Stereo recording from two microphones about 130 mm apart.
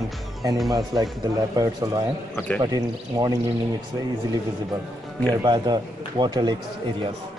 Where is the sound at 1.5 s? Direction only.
25° right (ahead or behind).